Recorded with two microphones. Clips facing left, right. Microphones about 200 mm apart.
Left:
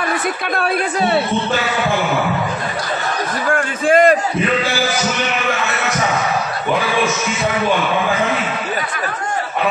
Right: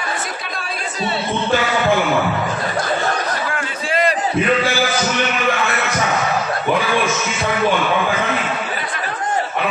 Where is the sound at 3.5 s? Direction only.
50° left (ahead or behind).